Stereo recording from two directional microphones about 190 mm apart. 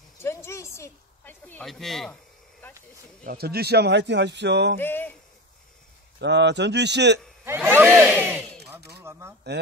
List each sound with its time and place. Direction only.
0.2 s a sound: 15° left (ahead or behind)
3.3 s speech: 55° right (ahead or behind)
4.7 s speech: 10° left (ahead or behind)
6.2 s speech: 65° right (ahead or behind)
7.4 s speech: 10° right (ahead or behind)
9.5 s speech: 60° right (ahead or behind)